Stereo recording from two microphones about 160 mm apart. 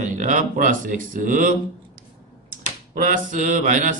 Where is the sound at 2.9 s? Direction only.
60° right (ahead or behind).